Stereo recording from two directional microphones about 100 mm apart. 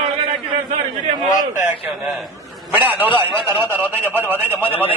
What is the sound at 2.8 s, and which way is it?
A man's voice, 20° right (ahead or behind).